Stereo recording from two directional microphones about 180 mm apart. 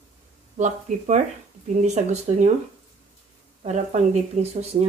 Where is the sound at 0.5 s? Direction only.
40° right (ahead or behind).